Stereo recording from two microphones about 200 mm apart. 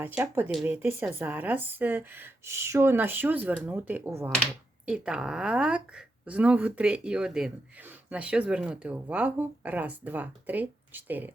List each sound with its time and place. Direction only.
0.0 s speech: 10° right (ahead or behind)